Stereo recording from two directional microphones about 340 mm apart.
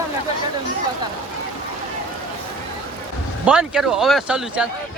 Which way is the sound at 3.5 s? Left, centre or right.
Centre.